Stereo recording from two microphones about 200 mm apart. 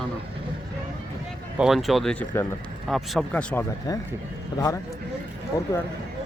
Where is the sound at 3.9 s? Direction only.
20° left (ahead or behind).